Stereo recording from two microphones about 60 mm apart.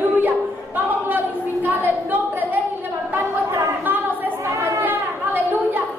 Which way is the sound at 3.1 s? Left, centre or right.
Right.